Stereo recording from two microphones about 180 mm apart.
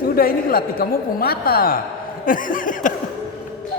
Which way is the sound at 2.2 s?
50° left (ahead or behind).